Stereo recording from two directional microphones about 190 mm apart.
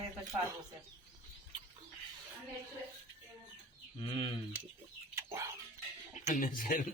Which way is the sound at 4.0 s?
30° left (ahead or behind).